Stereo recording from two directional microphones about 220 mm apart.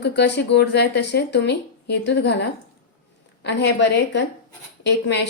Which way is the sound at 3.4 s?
50° left (ahead or behind).